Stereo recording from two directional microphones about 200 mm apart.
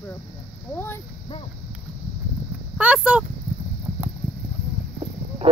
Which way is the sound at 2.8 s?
5° right (ahead or behind).